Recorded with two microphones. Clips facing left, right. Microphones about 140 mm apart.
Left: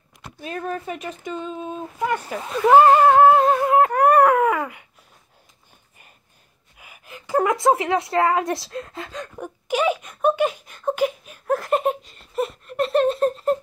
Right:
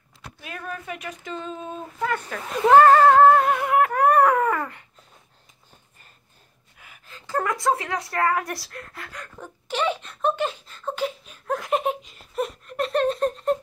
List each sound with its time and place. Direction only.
0.4 s speech: 35° left (ahead or behind)
1.3 s speech: 5° left (ahead or behind)
3.4 s speech: 30° left (ahead or behind)
3.9 s wail: 10° left (ahead or behind)
7.1 s a sound: 20° left (ahead or behind); by 13.6 s centre (ahead or behind)